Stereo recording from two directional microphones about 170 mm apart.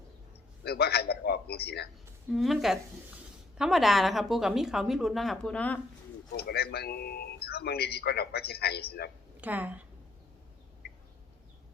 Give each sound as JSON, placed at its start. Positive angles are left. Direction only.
{"t": 0.6, "sound": "a sound", "side_deg": 70}
{"t": 2.3, "sound": "a woman's voice", "side_deg": 0}
{"t": 6.3, "sound": "speech", "side_deg": 70}
{"t": 9.4, "sound": "a woman's voice", "side_deg": -10}